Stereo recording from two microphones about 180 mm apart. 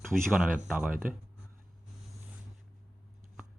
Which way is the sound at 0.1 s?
Centre (ahead or behind).